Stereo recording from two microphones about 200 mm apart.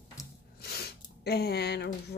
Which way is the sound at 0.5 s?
50° left (ahead or behind).